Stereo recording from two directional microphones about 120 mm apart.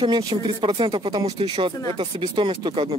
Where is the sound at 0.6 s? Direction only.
45° right (ahead or behind).